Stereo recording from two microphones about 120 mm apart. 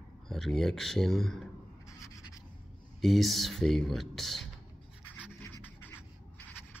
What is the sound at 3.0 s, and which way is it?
Speech, centre (ahead or behind).